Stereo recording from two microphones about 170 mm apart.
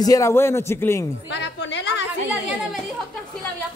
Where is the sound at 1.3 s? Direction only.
90° left.